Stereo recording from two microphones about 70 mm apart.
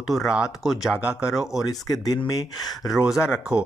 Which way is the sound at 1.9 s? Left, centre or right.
Left.